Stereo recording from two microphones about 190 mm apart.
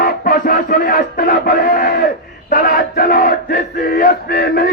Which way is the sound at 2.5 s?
50° left (ahead or behind).